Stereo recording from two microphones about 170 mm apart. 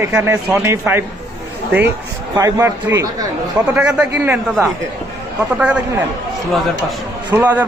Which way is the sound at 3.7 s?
5° right (ahead or behind).